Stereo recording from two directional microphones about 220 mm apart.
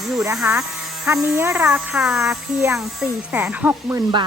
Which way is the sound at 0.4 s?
10° right (ahead or behind).